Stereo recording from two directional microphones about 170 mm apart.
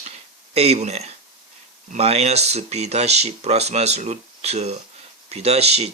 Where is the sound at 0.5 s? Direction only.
40° right (ahead or behind).